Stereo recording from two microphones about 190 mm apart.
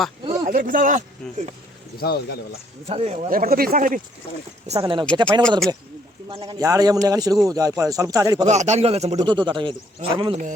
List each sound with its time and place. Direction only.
0.4 s speech: 45° right (ahead or behind)
2.0 s speech: 55° left (ahead or behind)
2.9 s a man's voice: 35° right (ahead or behind)
3.3 s speech: 50° right (ahead or behind)
4.7 s speech: 25° right (ahead or behind)
5.4 s speech: 5° left (ahead or behind)
6.3 s speech: 25° right (ahead or behind)
8.4 s a man's voice: 35° right (ahead or behind)